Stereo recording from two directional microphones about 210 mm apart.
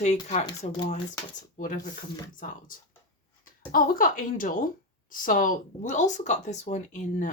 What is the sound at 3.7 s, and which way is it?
Speech, 40° left (ahead or behind).